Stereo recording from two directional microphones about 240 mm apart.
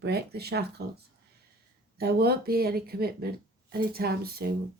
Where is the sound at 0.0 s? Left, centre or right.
Right.